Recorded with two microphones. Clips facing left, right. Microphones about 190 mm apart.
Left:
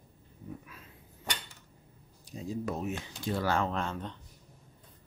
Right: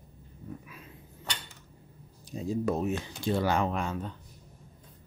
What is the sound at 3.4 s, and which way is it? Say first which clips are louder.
Speech: right 2 dB; 15° right (ahead or behind).